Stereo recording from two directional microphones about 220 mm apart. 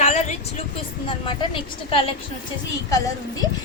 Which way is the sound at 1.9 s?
25° left (ahead or behind).